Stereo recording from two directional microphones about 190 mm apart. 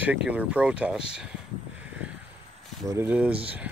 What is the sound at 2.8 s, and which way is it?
Speech, 10° right (ahead or behind).